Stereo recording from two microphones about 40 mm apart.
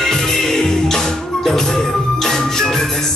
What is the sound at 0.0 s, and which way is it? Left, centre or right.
Music, centre.